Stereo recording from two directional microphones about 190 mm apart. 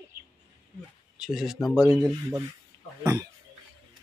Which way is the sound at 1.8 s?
15° right (ahead or behind).